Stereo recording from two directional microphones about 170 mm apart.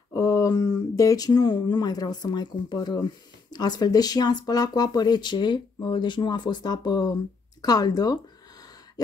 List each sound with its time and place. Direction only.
0.1 s speech: 20° left (ahead or behind)